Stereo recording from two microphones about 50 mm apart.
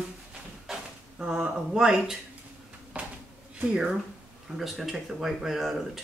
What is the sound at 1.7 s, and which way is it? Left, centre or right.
Speech, centre.